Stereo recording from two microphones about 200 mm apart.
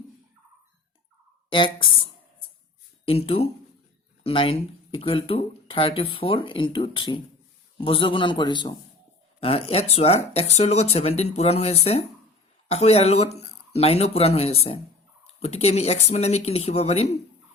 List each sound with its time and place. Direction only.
1.5 s speech: 25° left (ahead or behind)
3.1 s speech: 30° left (ahead or behind)